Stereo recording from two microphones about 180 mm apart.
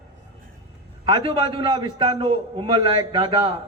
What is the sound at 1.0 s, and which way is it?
A man's voice, 30° right (ahead or behind).